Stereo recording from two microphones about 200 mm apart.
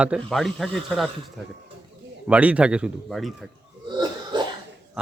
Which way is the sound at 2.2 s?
5° right (ahead or behind).